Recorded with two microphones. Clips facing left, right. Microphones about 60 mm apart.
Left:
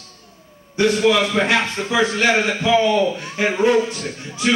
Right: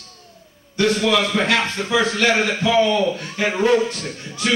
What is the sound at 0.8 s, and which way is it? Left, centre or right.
A man's voice, centre.